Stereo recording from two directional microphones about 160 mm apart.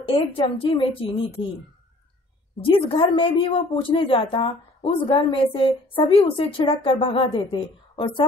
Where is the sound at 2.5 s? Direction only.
35° left (ahead or behind).